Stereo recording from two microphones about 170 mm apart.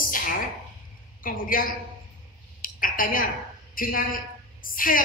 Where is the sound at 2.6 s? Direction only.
55° left (ahead or behind).